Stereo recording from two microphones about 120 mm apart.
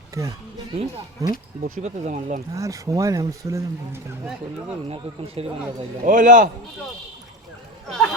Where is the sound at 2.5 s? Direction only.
25° right (ahead or behind).